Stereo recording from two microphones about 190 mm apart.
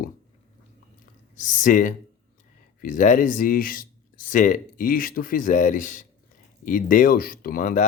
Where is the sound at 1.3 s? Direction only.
40° left (ahead or behind).